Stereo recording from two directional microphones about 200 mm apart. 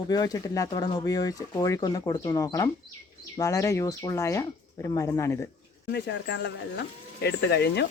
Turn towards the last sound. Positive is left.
turn(degrees=55)  # may be behind; listen again after turning